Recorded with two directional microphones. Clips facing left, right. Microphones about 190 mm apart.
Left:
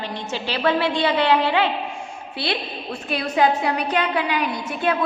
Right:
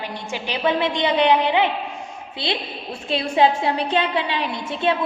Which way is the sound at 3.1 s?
25° right (ahead or behind).